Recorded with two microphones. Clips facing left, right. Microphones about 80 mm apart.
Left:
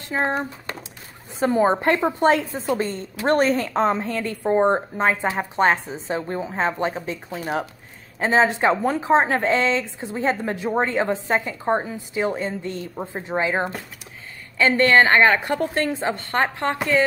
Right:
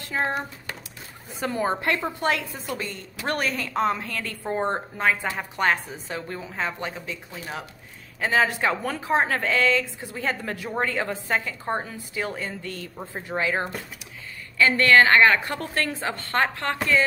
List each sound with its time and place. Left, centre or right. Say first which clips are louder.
0.1 s speech: left 3 dB; left
1.4 s a woman's voice: left 7 dB; left
8.2 s a woman's voice: left 4 dB; left